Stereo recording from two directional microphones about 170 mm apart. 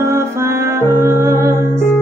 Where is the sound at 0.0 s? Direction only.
15° right (ahead or behind).